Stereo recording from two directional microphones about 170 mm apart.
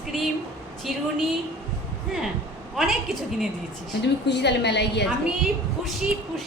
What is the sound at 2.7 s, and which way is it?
Speech, centre (ahead or behind).